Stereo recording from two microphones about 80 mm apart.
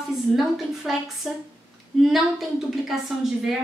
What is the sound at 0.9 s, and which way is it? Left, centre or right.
Speech, centre.